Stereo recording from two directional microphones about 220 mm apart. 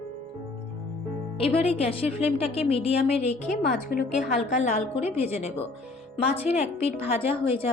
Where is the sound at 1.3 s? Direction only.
25° left (ahead or behind).